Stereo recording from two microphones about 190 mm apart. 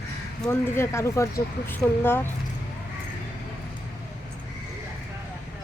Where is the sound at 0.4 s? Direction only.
15° left (ahead or behind).